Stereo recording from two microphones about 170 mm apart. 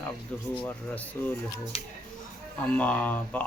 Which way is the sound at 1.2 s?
15° left (ahead or behind).